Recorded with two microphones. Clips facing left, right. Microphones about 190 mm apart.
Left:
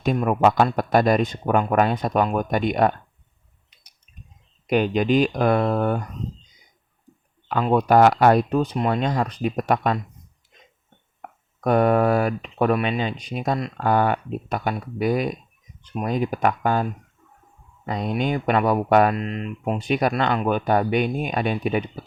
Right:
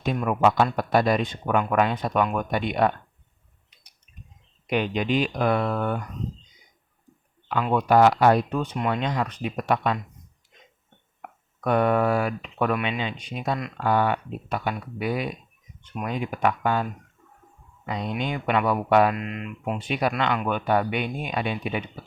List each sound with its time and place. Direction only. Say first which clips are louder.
0.0 s speech: left 3 dB; 45° left (ahead or behind)
4.6 s speech: left 5 dB; 40° left (ahead or behind)
7.4 s speech: left 3 dB; 40° left (ahead or behind)
11.2 s speech: left 4 dB; 40° left (ahead or behind)
17.8 s speech: left 4 dB; 45° left (ahead or behind)
19.1 s speech: left 4 dB; 35° left (ahead or behind)